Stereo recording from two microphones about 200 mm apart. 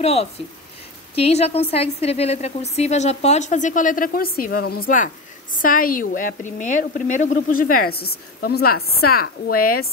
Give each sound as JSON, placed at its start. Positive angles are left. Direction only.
{"t": 0.0, "sound": "a woman's voice", "side_deg": 30}